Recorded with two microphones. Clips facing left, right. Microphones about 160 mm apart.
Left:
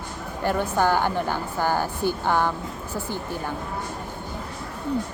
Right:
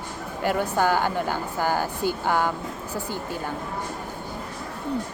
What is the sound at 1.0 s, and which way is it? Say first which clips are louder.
Speech: left 1 dB; 15° left (ahead or behind).